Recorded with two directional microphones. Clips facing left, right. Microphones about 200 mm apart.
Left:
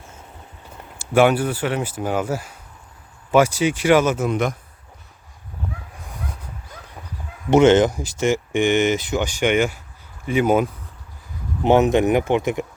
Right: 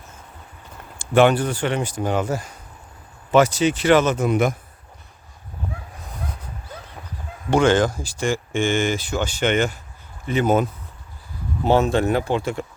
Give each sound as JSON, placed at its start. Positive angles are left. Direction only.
{"t": 0.9, "sound": "speech", "side_deg": 10}
{"t": 4.3, "sound": "speech", "side_deg": -5}
{"t": 7.5, "sound": "speech", "side_deg": 20}